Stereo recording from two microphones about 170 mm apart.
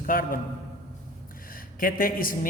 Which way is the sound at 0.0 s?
55° left (ahead or behind).